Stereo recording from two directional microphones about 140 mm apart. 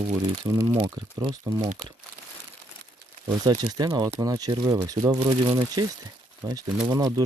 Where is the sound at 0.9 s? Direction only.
35° right (ahead or behind).